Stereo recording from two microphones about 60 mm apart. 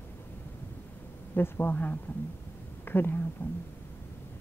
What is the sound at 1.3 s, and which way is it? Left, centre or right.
Speech, left.